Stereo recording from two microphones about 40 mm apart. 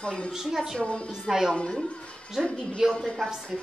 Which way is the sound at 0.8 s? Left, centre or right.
Left.